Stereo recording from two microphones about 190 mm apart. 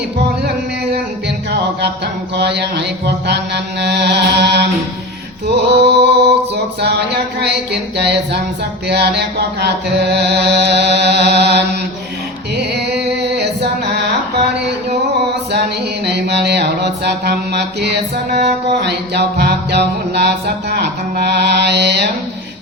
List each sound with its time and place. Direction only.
2.3 s mantra: 60° right (ahead or behind)
5.5 s a sound: 60° right (ahead or behind)
7.3 s mantra: 60° right (ahead or behind)
12.5 s music: 60° right (ahead or behind)
16.0 s mantra: 60° right (ahead or behind)